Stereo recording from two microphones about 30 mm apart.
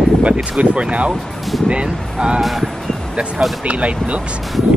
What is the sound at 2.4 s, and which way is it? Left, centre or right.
Speech, centre.